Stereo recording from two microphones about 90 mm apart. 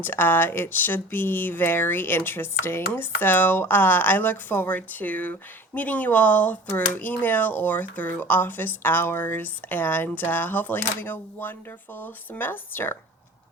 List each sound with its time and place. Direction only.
0.0 s speech: 25° left (ahead or behind)